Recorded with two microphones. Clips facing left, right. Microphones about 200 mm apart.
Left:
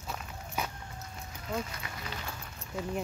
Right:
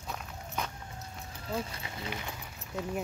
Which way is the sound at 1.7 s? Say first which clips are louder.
Right 2 dB; 25° right (ahead or behind).